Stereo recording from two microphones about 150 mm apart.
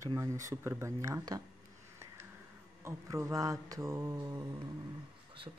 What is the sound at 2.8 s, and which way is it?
Speech, 20° right (ahead or behind).